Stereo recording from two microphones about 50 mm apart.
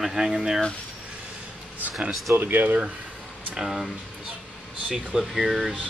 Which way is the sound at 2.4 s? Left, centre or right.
Right.